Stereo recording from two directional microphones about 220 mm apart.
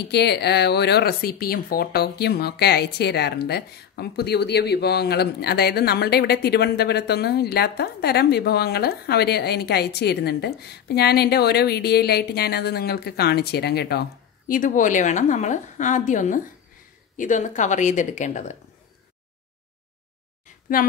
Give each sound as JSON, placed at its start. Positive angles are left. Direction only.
{"t": 0.1, "sound": "speech", "side_deg": 50}
{"t": 14.5, "sound": "a woman's voice", "side_deg": 35}